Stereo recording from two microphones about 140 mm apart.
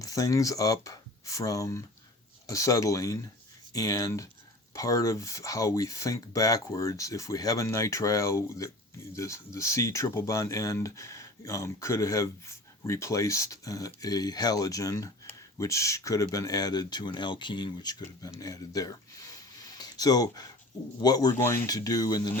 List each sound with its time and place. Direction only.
0.0 s speech: 25° left (ahead or behind)